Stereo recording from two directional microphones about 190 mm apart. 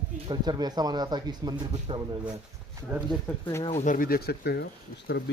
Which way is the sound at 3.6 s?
40° left (ahead or behind).